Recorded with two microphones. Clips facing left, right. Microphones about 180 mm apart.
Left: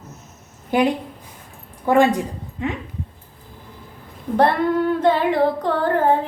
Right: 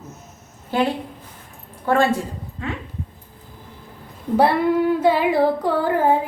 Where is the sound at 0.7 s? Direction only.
15° left (ahead or behind).